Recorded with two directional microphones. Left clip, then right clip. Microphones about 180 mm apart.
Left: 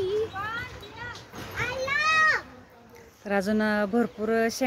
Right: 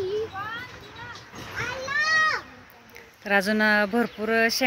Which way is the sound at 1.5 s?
30° right (ahead or behind).